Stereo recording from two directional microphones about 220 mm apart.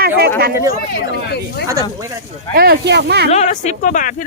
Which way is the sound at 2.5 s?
45° right (ahead or behind).